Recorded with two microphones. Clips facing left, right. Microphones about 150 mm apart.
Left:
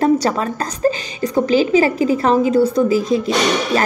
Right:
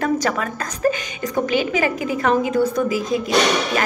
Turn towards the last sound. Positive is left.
turn(degrees=30)  # may be behind; listen again after turning